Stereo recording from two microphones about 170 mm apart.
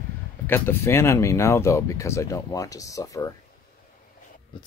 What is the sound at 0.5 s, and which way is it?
Speech, 15° left (ahead or behind).